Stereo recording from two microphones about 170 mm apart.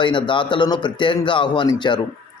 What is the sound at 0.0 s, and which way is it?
Speech, 30° left (ahead or behind).